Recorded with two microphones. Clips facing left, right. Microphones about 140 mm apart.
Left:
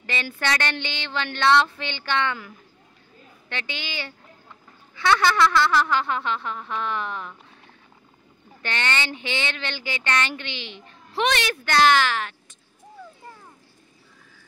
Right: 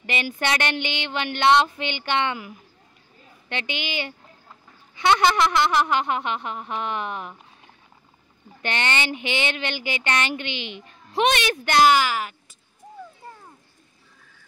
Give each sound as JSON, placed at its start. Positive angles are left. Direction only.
{"t": 0.0, "sound": "speech", "side_deg": -15}
{"t": 4.9, "sound": "a sound", "side_deg": -20}
{"t": 8.6, "sound": "speech", "side_deg": -20}